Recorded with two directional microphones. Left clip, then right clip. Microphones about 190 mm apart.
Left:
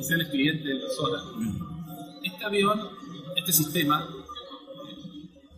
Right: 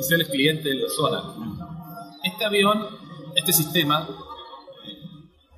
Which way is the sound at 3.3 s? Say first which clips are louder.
Right 5 dB; 45° right (ahead or behind).